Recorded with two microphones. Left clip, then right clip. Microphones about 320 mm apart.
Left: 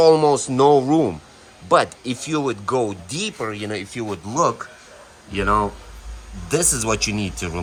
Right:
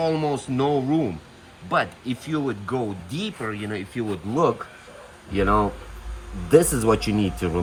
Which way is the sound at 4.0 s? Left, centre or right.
Left.